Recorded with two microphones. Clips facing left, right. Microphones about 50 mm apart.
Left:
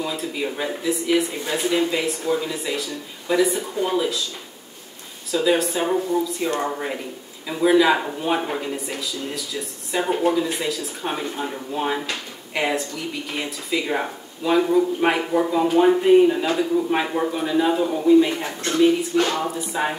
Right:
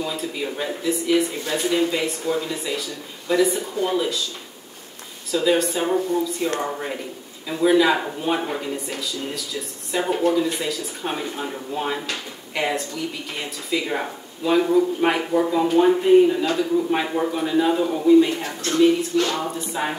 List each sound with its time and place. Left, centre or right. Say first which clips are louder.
0.0 s speech: left 1 dB; centre
5.3 s a man's voice: even; centre
19.1 s a sound: left 1 dB; left
19.4 s speech: left 2 dB; centre